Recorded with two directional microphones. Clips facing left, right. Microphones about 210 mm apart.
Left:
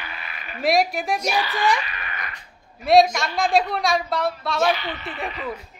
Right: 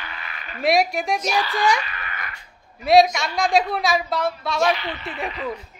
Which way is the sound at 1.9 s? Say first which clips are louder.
Even; 20° left (ahead or behind).